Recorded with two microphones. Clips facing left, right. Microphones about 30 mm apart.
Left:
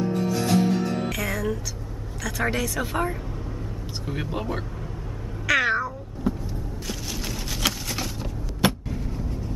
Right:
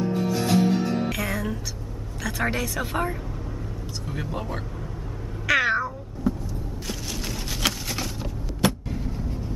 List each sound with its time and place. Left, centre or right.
0.0 s music: centre
2.2 s speech: centre
4.1 s speech: centre
5.5 s cat: centre
6.3 s vehicle: centre
6.9 s a sound: centre